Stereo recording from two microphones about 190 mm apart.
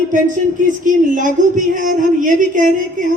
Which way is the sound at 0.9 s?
45° right (ahead or behind).